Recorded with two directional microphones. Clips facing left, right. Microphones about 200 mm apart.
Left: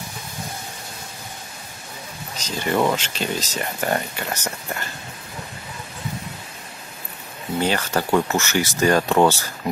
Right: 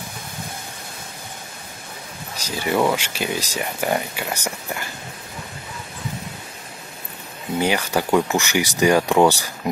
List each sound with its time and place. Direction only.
2.3 s speech: 10° right (ahead or behind)
7.5 s speech: 10° right (ahead or behind)